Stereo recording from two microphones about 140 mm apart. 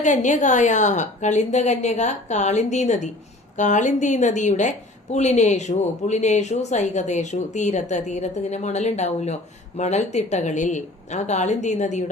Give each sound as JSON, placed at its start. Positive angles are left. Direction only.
{"t": 0.0, "sound": "speech", "side_deg": 60}